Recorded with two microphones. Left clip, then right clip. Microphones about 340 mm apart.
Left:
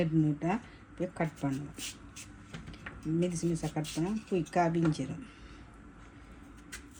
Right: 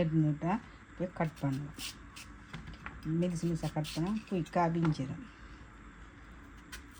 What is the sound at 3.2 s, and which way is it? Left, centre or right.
Speech, right.